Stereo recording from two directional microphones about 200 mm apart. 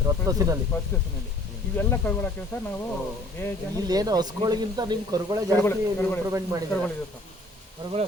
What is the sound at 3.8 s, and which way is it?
Speech, 20° right (ahead or behind).